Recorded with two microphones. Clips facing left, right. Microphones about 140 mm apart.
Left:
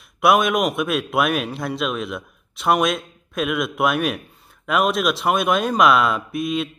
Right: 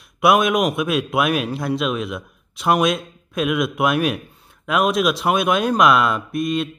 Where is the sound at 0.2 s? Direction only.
Centre (ahead or behind).